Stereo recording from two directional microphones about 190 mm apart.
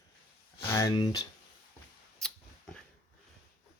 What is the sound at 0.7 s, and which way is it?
Speech, 20° left (ahead or behind).